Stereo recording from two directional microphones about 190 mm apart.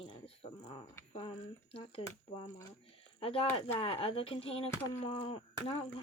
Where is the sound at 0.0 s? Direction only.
25° left (ahead or behind).